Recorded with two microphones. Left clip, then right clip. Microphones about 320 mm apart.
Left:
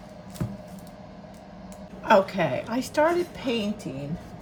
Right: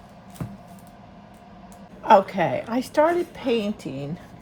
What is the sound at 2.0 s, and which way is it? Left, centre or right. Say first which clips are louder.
Speech: right 3 dB; centre.